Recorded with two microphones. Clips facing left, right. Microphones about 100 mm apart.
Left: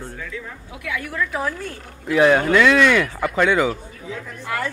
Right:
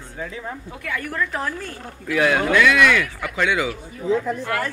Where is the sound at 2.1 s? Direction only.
30° left (ahead or behind).